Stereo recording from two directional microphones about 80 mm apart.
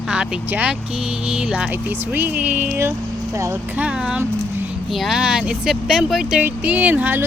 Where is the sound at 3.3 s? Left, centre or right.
Right.